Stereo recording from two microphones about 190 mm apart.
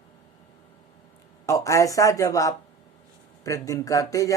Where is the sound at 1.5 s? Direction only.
15° left (ahead or behind).